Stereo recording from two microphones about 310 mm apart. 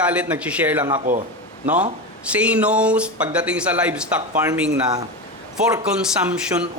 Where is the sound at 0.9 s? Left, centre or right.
Right.